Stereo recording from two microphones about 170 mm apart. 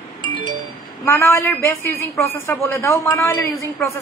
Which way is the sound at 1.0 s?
15° left (ahead or behind).